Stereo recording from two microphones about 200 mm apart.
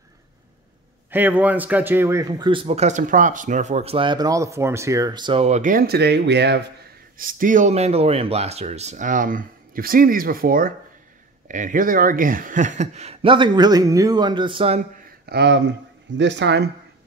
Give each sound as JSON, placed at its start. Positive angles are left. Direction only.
{"t": 1.1, "sound": "a man's voice", "side_deg": -10}
{"t": 7.2, "sound": "speech", "side_deg": -45}
{"t": 15.2, "sound": "speech", "side_deg": -55}